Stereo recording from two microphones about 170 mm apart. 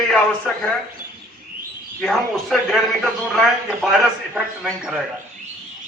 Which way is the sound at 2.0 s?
Centre (ahead or behind).